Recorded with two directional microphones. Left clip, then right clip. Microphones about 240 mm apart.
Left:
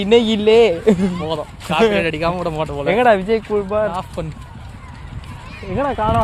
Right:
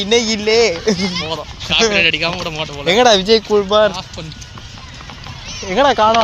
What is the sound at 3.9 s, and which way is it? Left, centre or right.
Speech, left.